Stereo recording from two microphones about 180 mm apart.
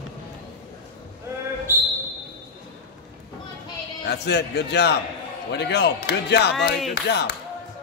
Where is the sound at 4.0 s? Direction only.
70° left (ahead or behind).